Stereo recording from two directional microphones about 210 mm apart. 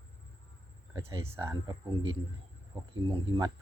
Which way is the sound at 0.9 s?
15° right (ahead or behind).